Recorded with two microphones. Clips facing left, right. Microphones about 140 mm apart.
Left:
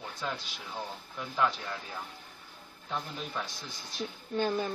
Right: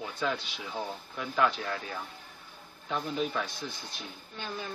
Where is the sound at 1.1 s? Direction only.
75° right (ahead or behind).